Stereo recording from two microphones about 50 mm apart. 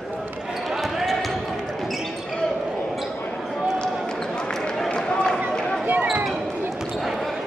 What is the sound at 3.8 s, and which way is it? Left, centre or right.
Basketball bounce, centre.